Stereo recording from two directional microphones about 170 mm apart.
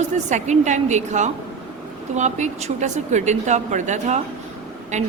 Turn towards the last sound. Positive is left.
turn(degrees=-40)  # may be behind; listen again after turning